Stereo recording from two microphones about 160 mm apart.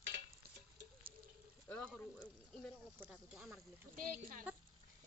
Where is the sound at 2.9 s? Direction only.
5° right (ahead or behind).